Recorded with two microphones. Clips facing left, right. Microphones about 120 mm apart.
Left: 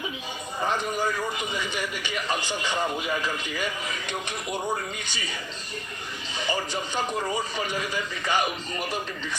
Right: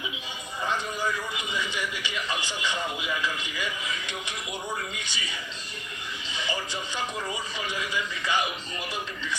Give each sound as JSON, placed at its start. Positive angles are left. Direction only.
{"t": 0.6, "sound": "a man's voice", "side_deg": 40}
{"t": 6.9, "sound": "a man's voice", "side_deg": 40}